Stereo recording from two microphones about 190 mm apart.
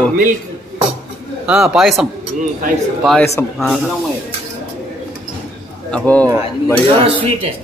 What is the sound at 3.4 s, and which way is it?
Speech, 10° left (ahead or behind).